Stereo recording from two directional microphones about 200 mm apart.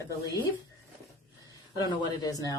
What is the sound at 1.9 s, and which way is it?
Speech, 20° left (ahead or behind).